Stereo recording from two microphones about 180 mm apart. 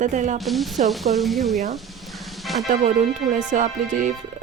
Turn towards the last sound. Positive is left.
turn(degrees=-45)  # may be behind; listen again after turning